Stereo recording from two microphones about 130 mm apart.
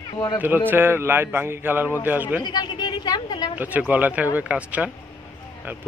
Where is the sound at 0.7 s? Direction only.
15° right (ahead or behind).